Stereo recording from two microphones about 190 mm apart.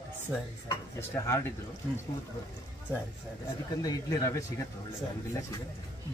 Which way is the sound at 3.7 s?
20° left (ahead or behind).